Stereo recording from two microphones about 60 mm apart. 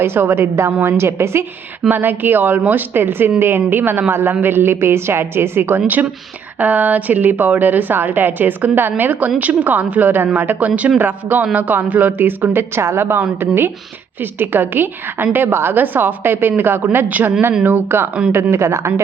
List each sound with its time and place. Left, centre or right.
0.0 s a woman's voice: right
1.9 s a woman's voice: right
18.5 s a woman's voice: right